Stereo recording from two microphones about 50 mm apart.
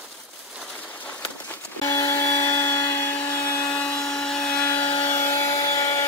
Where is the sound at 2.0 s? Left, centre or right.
Left.